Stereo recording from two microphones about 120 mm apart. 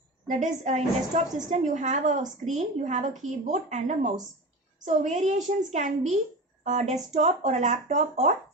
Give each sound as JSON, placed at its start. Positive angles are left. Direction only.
{"t": 0.3, "sound": "a woman's voice", "side_deg": -90}
{"t": 2.4, "sound": "a woman's voice", "side_deg": -75}
{"t": 6.7, "sound": "speech", "side_deg": -75}